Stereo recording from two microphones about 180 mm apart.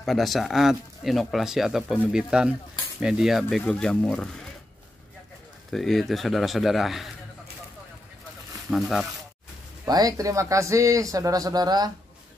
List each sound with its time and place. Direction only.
0.0 s speech: centre (ahead or behind)
5.7 s speech: centre (ahead or behind)
8.6 s speech: centre (ahead or behind)
9.8 s speech: 20° right (ahead or behind)